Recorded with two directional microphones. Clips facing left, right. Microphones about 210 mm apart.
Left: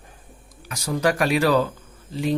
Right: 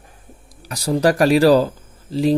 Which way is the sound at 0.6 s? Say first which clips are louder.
Right 6 dB; 35° right (ahead or behind).